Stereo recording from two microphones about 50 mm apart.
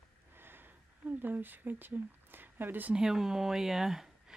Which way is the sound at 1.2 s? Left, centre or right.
Right.